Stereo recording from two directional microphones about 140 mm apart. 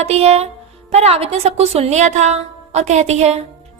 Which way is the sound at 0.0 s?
50° right (ahead or behind).